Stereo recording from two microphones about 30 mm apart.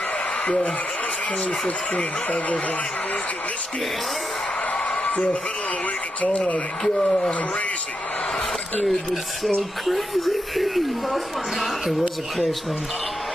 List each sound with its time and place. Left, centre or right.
2.2 s speech: left
4.7 s a sound: left
5.1 s a man's voice: left
6.8 s speech: centre
8.8 s speech: centre